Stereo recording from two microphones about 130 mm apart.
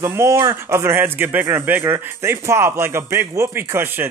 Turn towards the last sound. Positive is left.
turn(degrees=-15)  # may be behind; listen again after turning